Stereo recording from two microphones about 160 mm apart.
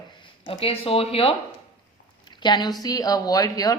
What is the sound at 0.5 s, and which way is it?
Speech, 35° left (ahead or behind).